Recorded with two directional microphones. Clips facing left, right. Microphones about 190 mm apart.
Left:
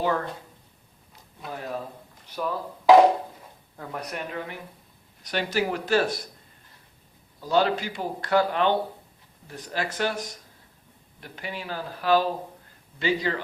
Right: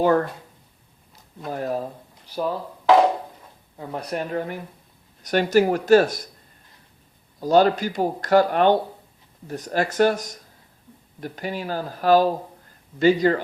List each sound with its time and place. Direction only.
0.0 s speech: 50° right (ahead or behind)
1.5 s speech: 45° right (ahead or behind)
2.2 s speech: 35° right (ahead or behind)
3.9 s speech: 35° right (ahead or behind)
7.4 s speech: 45° right (ahead or behind)